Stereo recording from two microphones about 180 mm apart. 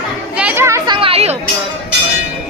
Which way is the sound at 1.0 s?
30° right (ahead or behind).